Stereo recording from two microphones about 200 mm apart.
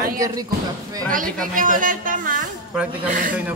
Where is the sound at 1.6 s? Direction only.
40° right (ahead or behind).